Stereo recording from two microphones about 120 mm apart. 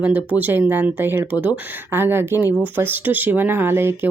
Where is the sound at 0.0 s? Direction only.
15° right (ahead or behind).